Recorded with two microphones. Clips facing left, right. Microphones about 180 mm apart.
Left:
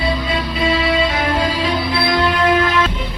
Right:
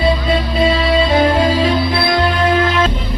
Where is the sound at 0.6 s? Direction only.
30° right (ahead or behind).